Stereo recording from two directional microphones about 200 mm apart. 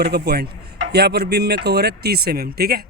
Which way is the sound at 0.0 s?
55° right (ahead or behind).